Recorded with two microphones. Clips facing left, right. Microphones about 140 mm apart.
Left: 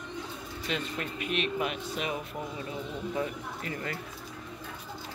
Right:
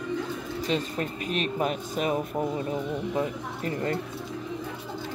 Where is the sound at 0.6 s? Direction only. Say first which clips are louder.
Right 5 dB; 35° right (ahead or behind).